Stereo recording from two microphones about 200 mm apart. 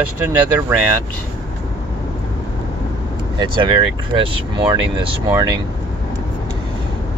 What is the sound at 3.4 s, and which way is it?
Speech, 25° right (ahead or behind).